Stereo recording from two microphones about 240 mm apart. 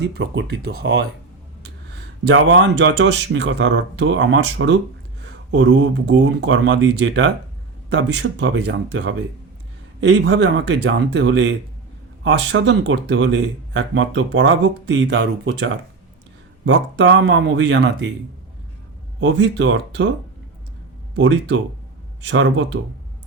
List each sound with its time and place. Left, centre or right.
0.0 s speech: right
2.3 s speech: right
19.2 s speech: right
21.2 s speech: right